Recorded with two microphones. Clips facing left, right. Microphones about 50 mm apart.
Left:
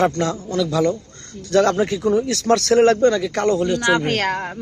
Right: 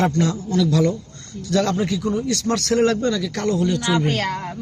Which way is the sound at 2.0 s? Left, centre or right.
Left.